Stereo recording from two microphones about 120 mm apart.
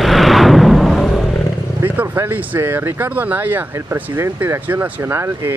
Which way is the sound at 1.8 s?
20° right (ahead or behind).